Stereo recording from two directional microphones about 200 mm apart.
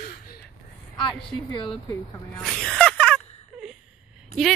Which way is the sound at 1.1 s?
5° left (ahead or behind).